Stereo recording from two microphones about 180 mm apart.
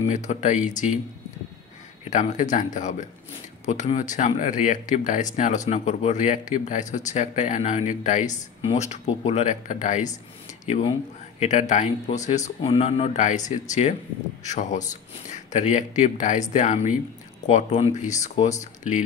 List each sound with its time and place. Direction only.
0.0 s speech: 40° left (ahead or behind)
2.0 s speech: 45° left (ahead or behind)